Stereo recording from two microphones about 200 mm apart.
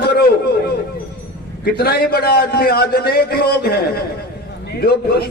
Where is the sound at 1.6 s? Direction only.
50° left (ahead or behind).